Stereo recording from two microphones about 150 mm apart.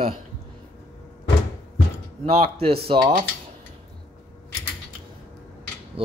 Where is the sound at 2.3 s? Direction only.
40° right (ahead or behind).